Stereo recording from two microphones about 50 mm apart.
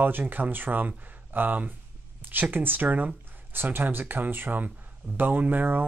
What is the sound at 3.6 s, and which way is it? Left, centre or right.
Speech, right.